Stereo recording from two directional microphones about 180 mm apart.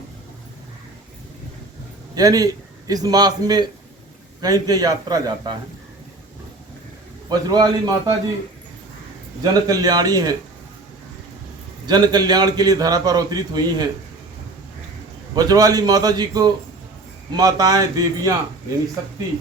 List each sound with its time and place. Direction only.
2.1 s a man's voice: 20° right (ahead or behind)
7.3 s a man's voice: 20° right (ahead or behind)
9.4 s a man's voice: 20° right (ahead or behind)
11.9 s a man's voice: 25° right (ahead or behind)
15.4 s a man's voice: 20° right (ahead or behind)